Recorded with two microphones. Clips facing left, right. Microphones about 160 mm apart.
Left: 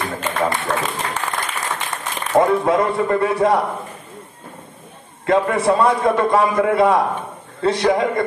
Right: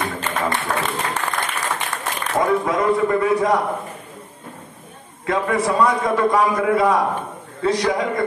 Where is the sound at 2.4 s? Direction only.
30° left (ahead or behind).